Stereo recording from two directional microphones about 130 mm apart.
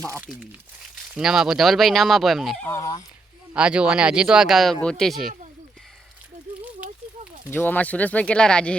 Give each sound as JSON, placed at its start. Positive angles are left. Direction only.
{"t": 1.0, "sound": "speech", "side_deg": -5}
{"t": 2.6, "sound": "speech", "side_deg": 25}
{"t": 3.5, "sound": "speech", "side_deg": -10}
{"t": 7.5, "sound": "speech", "side_deg": 15}